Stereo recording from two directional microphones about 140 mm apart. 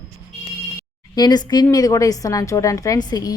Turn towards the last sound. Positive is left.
turn(degrees=30)  # may be behind; listen again after turning